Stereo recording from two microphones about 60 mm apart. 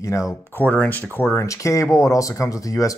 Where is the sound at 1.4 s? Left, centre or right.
Left.